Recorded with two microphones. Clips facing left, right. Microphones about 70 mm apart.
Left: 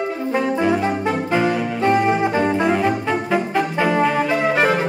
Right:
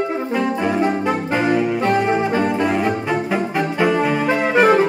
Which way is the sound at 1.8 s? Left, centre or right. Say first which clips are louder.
Left 1 dB; left.